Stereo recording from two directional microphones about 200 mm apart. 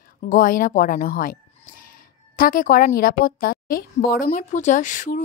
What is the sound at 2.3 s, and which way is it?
Speech, 45° left (ahead or behind).